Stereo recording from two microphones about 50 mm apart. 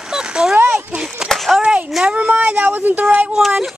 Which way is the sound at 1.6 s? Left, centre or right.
Right.